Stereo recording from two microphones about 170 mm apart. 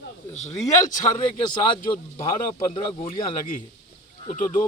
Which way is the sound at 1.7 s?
30° left (ahead or behind).